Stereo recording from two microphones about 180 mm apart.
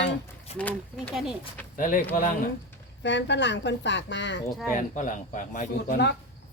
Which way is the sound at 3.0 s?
80° left.